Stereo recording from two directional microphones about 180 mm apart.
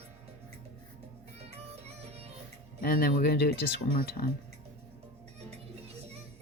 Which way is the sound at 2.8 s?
55° left (ahead or behind).